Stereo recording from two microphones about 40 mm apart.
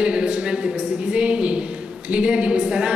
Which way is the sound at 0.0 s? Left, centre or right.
Right.